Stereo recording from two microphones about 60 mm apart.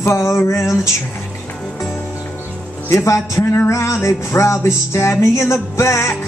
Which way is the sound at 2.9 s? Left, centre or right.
Left.